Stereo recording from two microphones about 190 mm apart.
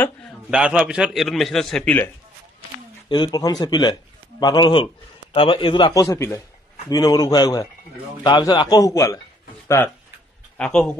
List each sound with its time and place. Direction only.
0.5 s a man's voice: 5° right (ahead or behind)
3.1 s a man's voice: 20° left (ahead or behind)
10.6 s a man's voice: 5° left (ahead or behind)